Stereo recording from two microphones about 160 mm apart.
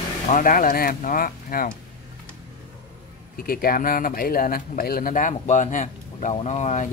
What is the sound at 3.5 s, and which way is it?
Speech, 65° left (ahead or behind).